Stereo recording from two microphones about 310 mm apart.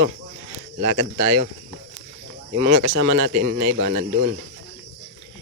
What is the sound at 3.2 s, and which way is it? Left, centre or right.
Speech, right.